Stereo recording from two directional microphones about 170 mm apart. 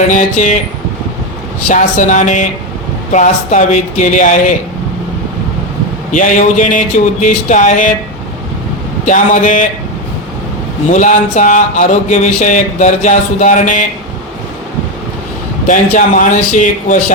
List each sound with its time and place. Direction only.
0.1 s speech: 45° left (ahead or behind)
1.6 s speech: 50° left (ahead or behind)
6.1 s speech: 50° left (ahead or behind)
9.0 s speech: 50° left (ahead or behind)
10.9 s speech: 45° left (ahead or behind)
15.6 s speech: 50° left (ahead or behind)